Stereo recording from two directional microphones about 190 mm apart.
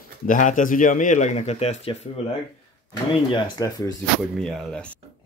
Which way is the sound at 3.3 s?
20° left (ahead or behind).